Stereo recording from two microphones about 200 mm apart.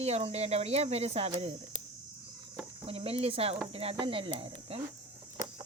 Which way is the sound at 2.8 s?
30° right (ahead or behind).